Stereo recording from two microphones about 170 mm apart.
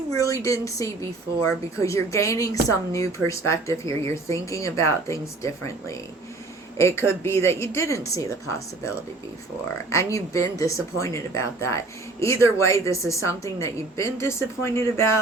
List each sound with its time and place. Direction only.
0.2 s a woman's voice: 20° left (ahead or behind)
9.9 s speech: 20° left (ahead or behind)